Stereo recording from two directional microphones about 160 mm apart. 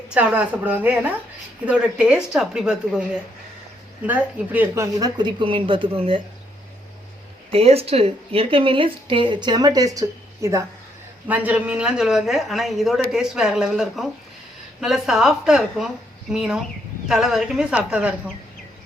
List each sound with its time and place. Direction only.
0.1 s a woman's voice: 10° right (ahead or behind)
4.0 s speech: 10° right (ahead or behind); by 6.2 s 35° right (ahead or behind)
7.5 s speech: 40° right (ahead or behind); by 10.6 s 20° right (ahead or behind)
11.3 s speech: 10° right (ahead or behind)